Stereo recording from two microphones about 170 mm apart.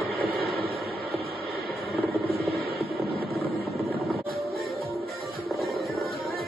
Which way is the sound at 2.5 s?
65° right (ahead or behind).